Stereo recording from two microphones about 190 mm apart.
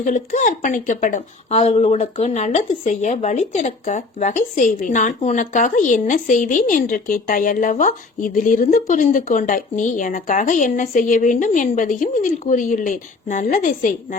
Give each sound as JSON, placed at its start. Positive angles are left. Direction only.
{"t": 0.0, "sound": "a woman's voice", "side_deg": 40}